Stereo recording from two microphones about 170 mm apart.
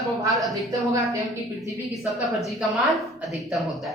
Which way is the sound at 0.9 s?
20° right (ahead or behind).